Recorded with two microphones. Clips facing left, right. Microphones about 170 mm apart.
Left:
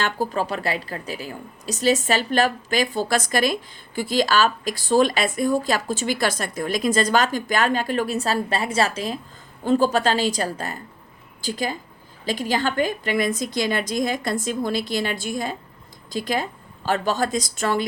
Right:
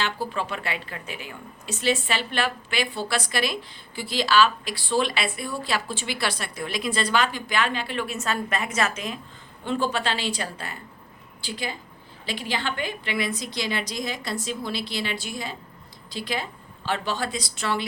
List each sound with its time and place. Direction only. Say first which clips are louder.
0.0 s a woman's voice: left 4 dB; 45° left (ahead or behind)